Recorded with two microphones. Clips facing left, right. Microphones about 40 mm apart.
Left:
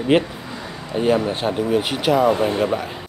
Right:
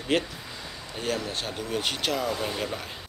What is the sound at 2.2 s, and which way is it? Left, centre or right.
Speech, left.